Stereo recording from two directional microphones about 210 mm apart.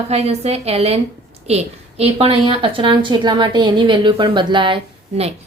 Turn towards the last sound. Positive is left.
turn(degrees=-25)  # may be behind; listen again after turning